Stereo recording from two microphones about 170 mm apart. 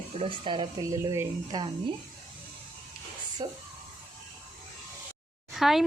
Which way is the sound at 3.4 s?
25° right (ahead or behind).